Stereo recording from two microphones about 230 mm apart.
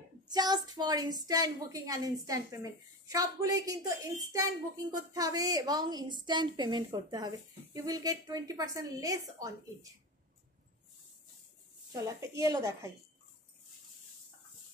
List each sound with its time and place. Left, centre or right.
0.3 s a woman's voice: centre
11.9 s a woman's voice: centre